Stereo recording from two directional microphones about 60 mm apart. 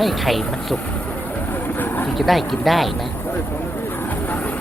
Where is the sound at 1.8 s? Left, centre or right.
Left.